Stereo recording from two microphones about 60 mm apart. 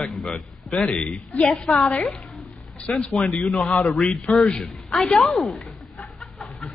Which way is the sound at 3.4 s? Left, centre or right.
Centre.